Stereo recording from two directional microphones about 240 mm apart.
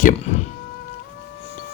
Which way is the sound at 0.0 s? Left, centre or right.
Left.